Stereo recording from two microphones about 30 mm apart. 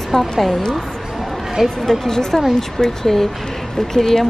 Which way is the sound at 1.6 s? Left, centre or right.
Centre.